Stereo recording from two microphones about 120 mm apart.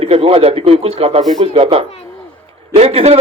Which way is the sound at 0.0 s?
55° right (ahead or behind).